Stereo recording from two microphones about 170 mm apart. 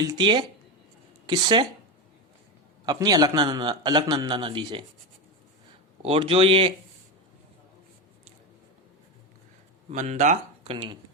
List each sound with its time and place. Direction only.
0.0 s a man's voice: 25° right (ahead or behind)
2.8 s a man's voice: 20° right (ahead or behind)
6.0 s speech: 35° right (ahead or behind)
9.9 s speech: 45° right (ahead or behind); by 10.9 s 30° right (ahead or behind)